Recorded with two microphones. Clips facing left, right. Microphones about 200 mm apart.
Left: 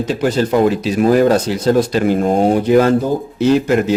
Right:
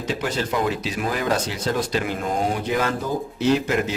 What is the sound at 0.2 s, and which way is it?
A man's voice, 45° left (ahead or behind).